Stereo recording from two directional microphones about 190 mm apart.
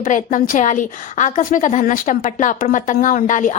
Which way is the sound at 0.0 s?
40° left (ahead or behind).